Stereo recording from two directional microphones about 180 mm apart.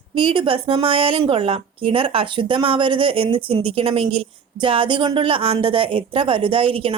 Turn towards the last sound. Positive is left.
turn(degrees=-30)  # may be behind; listen again after turning